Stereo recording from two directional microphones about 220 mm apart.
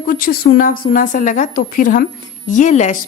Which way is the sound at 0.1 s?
40° left (ahead or behind).